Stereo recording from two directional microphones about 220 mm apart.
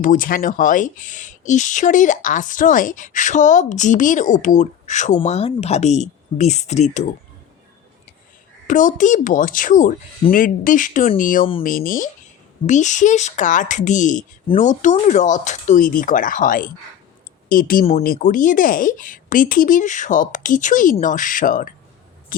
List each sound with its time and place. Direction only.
0.0 s speech: 40° left (ahead or behind)
8.6 s speech: 35° left (ahead or behind)